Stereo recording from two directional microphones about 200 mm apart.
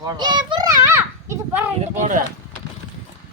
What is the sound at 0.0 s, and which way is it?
Children playing, 20° right (ahead or behind).